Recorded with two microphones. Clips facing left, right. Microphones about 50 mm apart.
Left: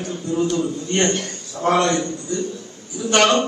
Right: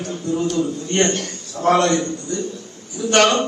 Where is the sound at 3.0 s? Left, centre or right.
Centre.